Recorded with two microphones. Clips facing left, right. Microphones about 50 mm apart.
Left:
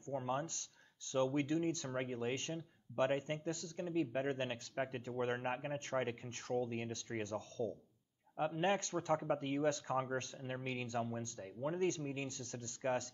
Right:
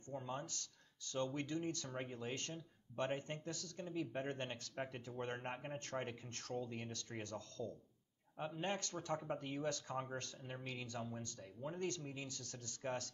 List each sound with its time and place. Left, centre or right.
0.0 s speech: left